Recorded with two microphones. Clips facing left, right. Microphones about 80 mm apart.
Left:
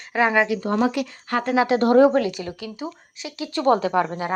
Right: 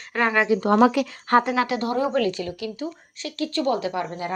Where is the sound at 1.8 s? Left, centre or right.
Left.